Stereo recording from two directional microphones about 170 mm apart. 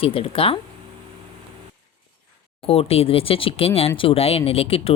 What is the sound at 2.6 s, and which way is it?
Speech, 35° left (ahead or behind).